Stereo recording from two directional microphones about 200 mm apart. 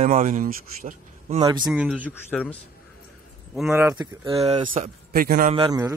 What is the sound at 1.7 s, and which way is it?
Speech, 5° right (ahead or behind).